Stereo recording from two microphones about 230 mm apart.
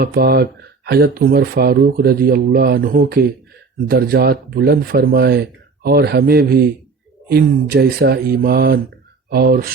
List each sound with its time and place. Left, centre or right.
0.0 s speech: right